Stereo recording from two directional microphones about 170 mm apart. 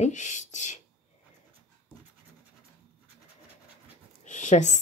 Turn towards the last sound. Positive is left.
turn(degrees=45)  # may be behind; listen again after turning